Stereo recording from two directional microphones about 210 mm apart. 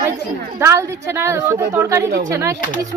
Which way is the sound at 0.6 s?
15° right (ahead or behind).